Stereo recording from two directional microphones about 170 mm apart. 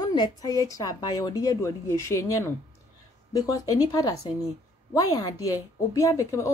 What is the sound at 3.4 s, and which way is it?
A woman's voice, 20° left (ahead or behind).